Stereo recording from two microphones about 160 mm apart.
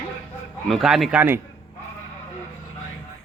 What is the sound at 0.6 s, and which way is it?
Speech, centre (ahead or behind).